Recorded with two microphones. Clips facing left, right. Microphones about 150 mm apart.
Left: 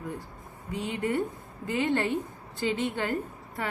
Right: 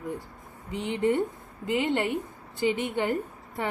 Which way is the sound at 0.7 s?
20° right (ahead or behind).